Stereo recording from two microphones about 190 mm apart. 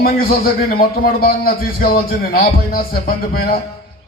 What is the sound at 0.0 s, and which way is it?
A man's voice, 50° left (ahead or behind).